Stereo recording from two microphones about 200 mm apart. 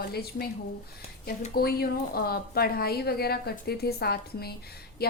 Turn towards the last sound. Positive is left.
turn(degrees=50)  # may be behind; listen again after turning